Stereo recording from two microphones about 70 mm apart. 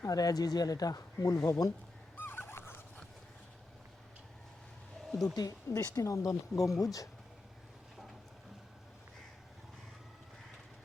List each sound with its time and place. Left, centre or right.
0.0 s speech: left
2.1 s a sound: left
5.2 s speech: left
5.7 s speech: left